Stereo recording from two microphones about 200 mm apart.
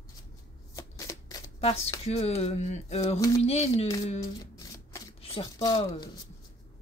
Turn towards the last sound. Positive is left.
turn(degrees=20)  # may be behind; listen again after turning